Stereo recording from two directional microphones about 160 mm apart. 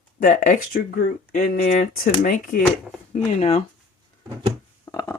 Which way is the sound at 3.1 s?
45° left (ahead or behind).